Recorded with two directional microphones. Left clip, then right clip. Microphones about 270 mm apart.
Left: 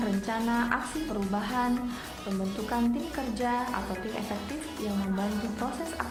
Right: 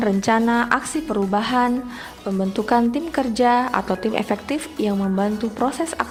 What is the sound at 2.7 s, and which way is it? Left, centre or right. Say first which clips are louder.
A woman's voice: right 12 dB; right.